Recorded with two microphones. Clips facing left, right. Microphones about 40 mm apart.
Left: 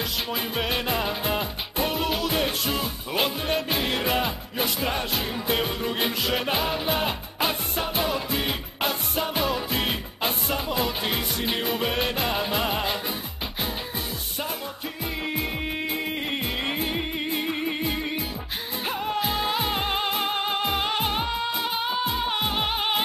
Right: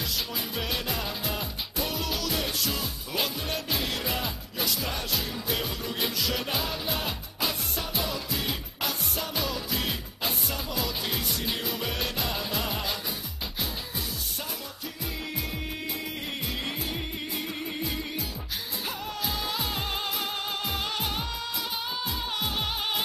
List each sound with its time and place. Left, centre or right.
0.3 s music: left
16.6 s music: left